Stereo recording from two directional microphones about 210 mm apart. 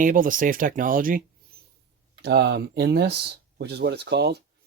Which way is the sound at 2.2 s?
50° right (ahead or behind).